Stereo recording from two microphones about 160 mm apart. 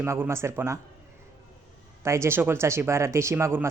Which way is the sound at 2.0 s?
15° right (ahead or behind).